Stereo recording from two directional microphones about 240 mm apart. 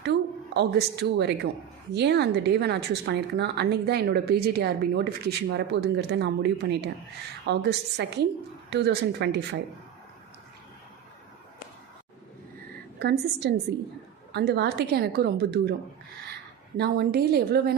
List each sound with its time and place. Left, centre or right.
0.0 s a sound: right
1.9 s speech: right
13.0 s speech: right
16.7 s a woman's voice: right